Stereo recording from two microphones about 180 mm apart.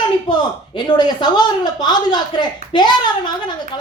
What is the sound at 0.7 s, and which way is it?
A woman's voice, 25° left (ahead or behind).